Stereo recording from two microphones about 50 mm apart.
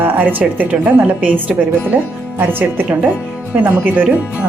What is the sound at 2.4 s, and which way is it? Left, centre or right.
A woman's voice, right.